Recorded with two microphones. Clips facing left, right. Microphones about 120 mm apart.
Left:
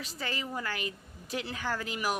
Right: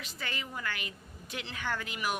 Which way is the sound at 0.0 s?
35° left (ahead or behind).